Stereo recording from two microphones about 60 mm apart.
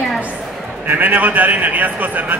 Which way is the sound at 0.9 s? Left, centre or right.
Right.